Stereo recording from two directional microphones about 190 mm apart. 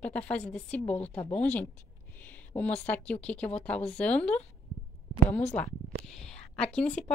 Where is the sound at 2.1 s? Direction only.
10° left (ahead or behind).